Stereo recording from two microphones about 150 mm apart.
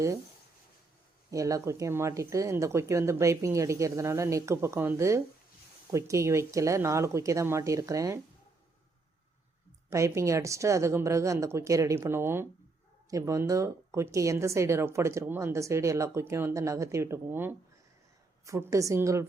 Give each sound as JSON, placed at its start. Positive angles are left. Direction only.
{"t": 1.3, "sound": "a woman's voice", "side_deg": -20}
{"t": 9.9, "sound": "a woman's voice", "side_deg": -20}